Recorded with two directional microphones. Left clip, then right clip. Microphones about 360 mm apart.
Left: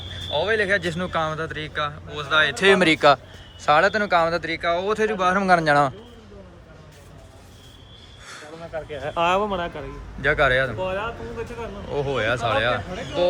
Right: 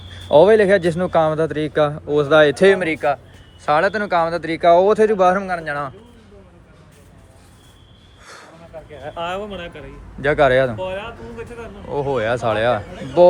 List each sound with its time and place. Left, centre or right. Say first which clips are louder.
0.3 s a man's voice: right 10 dB; centre
8.7 s speech: left 4 dB; left
9.5 s a man's voice: left 4 dB; centre